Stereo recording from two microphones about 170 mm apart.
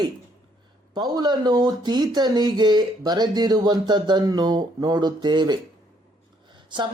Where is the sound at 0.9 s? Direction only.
25° right (ahead or behind).